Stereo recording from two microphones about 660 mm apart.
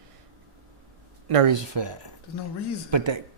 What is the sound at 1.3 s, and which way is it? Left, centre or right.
Speech, right.